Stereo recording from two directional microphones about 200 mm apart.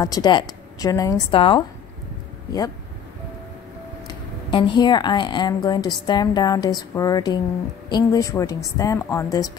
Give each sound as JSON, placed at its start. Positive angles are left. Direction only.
{"t": 0.0, "sound": "a woman's voice", "side_deg": 20}
{"t": 4.1, "sound": "a woman's voice", "side_deg": 25}